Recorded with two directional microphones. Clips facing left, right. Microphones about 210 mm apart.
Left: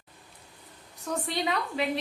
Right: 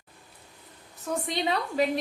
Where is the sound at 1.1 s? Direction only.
5° right (ahead or behind).